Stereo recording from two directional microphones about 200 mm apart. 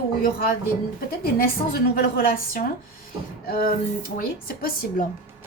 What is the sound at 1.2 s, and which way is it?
A woman's voice, 50° left (ahead or behind).